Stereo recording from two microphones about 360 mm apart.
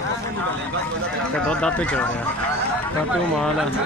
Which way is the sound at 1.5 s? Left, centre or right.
Centre.